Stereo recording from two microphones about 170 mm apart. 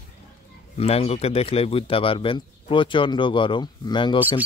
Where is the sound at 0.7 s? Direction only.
35° left (ahead or behind).